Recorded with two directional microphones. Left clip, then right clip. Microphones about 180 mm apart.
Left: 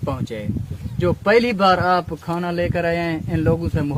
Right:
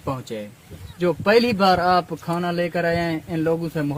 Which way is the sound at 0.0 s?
10° left (ahead or behind).